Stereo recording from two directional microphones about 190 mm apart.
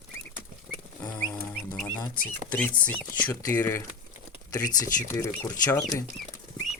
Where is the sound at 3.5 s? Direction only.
10° left (ahead or behind).